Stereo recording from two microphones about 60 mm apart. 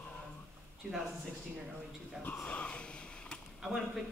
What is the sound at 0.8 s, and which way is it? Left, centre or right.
Speech, centre.